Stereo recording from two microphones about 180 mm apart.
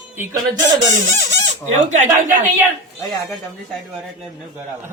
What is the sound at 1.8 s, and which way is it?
Speech, 45° right (ahead or behind).